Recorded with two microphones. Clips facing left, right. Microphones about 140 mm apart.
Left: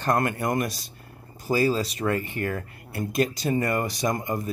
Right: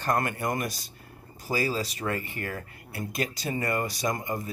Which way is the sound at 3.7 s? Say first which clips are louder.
Left 3 dB; 20° left (ahead or behind).